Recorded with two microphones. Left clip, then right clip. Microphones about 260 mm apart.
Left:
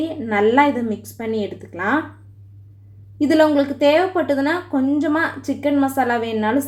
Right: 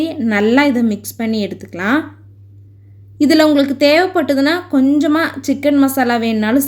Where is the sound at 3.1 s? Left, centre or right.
Right.